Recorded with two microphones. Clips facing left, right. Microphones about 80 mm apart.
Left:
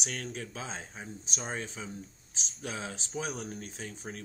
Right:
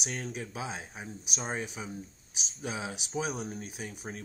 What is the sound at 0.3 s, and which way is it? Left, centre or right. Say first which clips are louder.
Speech: right 2 dB; centre.